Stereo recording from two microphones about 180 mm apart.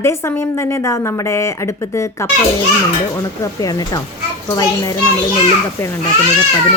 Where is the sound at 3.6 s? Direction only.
20° left (ahead or behind).